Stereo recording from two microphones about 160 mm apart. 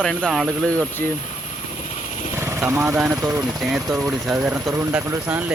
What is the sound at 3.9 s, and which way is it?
Speech, 20° right (ahead or behind).